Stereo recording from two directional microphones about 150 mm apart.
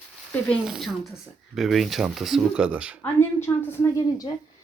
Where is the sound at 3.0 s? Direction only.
15° left (ahead or behind).